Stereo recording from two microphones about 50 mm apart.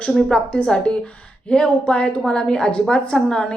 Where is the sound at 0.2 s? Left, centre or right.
Centre.